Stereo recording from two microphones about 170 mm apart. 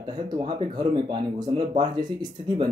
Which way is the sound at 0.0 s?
25° right (ahead or behind).